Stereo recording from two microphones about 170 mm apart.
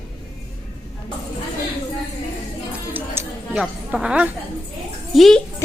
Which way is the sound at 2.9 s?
15° right (ahead or behind).